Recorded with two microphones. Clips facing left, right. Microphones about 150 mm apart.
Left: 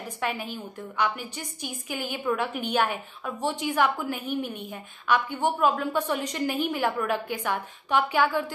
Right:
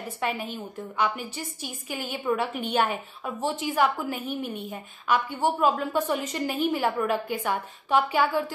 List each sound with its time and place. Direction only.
0.2 s a woman's voice: centre (ahead or behind)